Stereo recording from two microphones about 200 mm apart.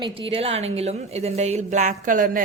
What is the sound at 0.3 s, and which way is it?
A woman's voice, 30° right (ahead or behind).